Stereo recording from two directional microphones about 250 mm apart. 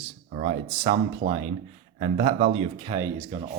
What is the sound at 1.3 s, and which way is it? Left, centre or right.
Speech, right.